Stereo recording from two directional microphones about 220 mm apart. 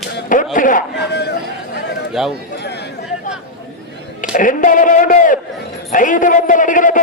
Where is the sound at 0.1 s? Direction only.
35° left (ahead or behind).